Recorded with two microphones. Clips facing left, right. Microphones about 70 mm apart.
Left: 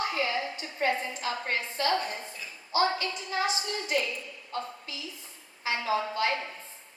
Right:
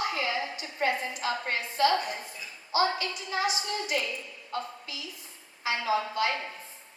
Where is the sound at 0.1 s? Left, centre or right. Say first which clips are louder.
Left 1 dB; left.